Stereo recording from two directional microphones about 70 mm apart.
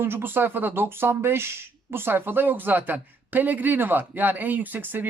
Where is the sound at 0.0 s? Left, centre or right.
Right.